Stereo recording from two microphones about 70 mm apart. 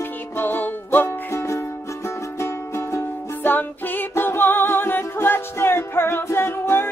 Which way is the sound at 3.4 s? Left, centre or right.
Left.